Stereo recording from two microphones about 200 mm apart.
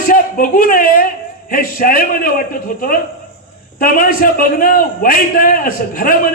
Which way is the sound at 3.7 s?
45° left (ahead or behind).